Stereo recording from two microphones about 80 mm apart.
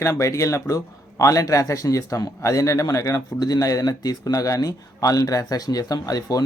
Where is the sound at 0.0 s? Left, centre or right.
Left.